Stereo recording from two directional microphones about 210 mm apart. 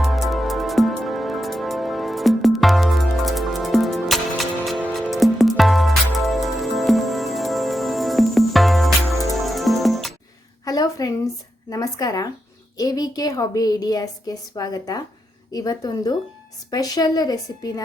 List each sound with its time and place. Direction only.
0.0 s music: centre (ahead or behind)
10.7 s a sound: 15° left (ahead or behind)
11.7 s a woman's voice: 15° left (ahead or behind)